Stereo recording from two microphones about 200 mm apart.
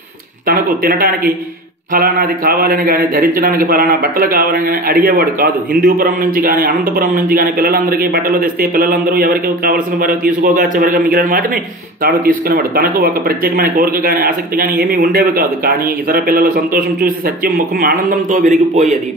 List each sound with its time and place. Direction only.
0.5 s a man's voice: 45° right (ahead or behind)